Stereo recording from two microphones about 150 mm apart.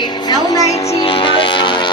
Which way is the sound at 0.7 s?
45° left (ahead or behind).